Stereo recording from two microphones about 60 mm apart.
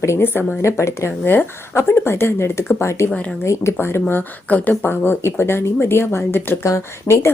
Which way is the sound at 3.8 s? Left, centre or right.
Left.